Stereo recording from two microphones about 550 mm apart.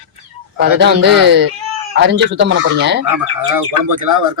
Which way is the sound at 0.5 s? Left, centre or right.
Centre.